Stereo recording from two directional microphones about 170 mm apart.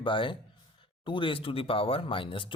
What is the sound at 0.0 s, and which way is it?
Speech, 30° left (ahead or behind).